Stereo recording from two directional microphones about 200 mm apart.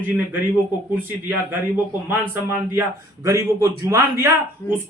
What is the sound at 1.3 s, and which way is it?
Speech, 10° right (ahead or behind).